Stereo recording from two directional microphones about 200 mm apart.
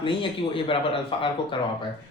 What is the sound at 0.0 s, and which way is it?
Speech, 25° left (ahead or behind).